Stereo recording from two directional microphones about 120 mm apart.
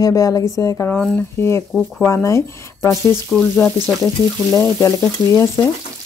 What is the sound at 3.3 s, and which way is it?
Frying, 5° left (ahead or behind).